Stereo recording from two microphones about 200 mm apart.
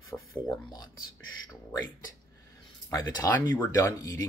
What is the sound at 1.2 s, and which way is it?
Speech, 85° left.